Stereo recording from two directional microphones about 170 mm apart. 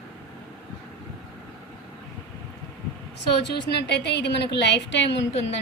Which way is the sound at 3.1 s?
80° left.